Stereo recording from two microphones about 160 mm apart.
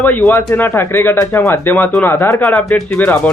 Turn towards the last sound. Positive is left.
turn(degrees=10)  # may be behind; listen again after turning